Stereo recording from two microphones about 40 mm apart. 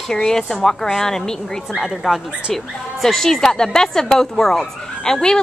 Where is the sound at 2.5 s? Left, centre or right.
Centre.